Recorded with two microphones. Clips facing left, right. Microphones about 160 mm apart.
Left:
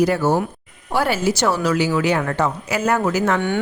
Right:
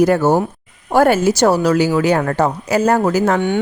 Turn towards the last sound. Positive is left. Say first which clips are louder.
# right 4 dB
turn(degrees=-20)  # may be behind; listen again after turning